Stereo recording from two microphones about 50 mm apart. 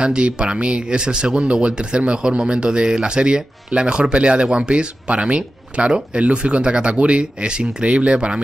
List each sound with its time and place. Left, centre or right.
0.0 s speech: right